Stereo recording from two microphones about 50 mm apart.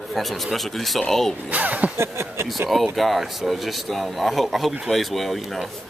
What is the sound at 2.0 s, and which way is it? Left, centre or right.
Speech, right.